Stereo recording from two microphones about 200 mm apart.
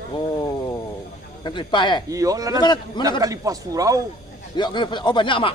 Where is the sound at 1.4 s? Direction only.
25° left (ahead or behind).